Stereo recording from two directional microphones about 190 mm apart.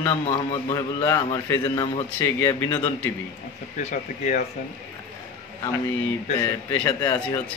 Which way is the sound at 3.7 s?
40° left (ahead or behind).